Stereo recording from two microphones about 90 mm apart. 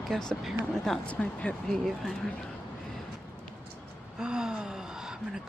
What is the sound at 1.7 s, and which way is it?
Speech, 5° left (ahead or behind).